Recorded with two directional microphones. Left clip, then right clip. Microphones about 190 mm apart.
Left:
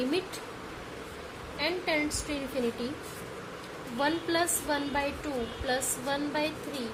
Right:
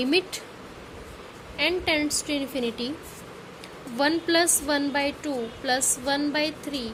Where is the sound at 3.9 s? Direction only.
50° right (ahead or behind).